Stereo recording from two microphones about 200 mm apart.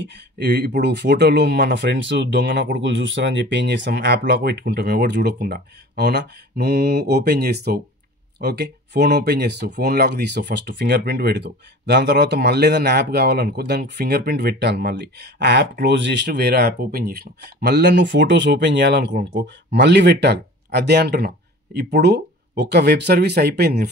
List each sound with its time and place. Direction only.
0.4 s speech: 55° right (ahead or behind)